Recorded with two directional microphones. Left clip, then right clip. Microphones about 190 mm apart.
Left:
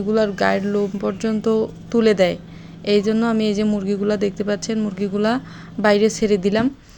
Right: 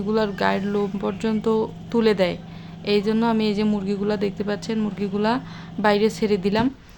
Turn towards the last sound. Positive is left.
turn(degrees=15)  # may be behind; listen again after turning